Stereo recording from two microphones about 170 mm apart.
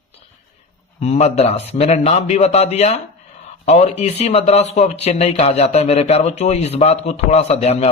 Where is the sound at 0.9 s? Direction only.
40° left (ahead or behind).